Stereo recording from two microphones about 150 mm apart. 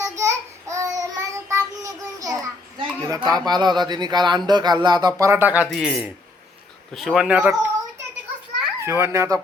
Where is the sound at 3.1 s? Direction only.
25° right (ahead or behind).